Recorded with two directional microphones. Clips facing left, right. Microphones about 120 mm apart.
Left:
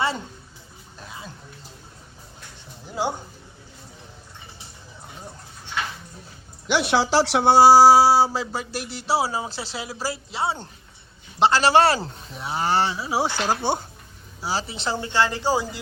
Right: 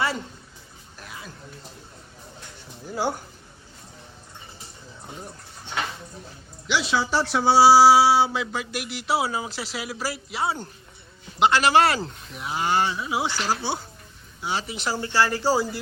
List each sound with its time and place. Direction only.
0.9 s music: 25° left (ahead or behind)
2.8 s speech: 20° left (ahead or behind)
6.7 s speech: 60° left (ahead or behind); by 13.2 s 35° left (ahead or behind)
13.2 s speech: 50° left (ahead or behind)
14.4 s speech: 30° left (ahead or behind)